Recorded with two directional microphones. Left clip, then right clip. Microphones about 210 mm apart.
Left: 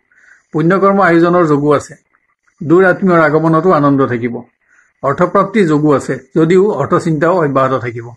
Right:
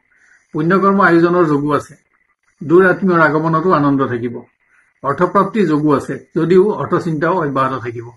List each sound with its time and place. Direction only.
0.2 s a man's voice: 50° left (ahead or behind)